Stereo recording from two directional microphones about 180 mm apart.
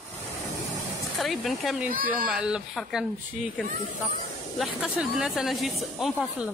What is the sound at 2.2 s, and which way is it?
Speech, 5° right (ahead or behind).